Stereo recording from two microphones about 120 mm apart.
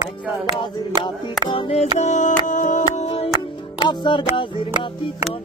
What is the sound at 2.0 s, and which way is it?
Music, 80° left.